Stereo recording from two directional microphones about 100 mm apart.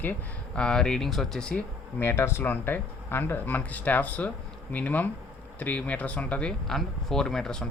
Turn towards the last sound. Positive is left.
turn(degrees=5)  # may be behind; listen again after turning